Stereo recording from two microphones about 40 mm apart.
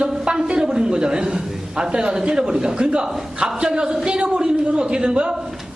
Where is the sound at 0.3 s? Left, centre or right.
Right.